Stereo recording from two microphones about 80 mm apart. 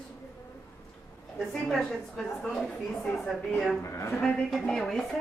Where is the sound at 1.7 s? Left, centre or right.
Centre.